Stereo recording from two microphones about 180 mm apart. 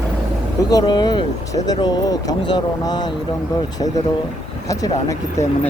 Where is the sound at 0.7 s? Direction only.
25° left (ahead or behind).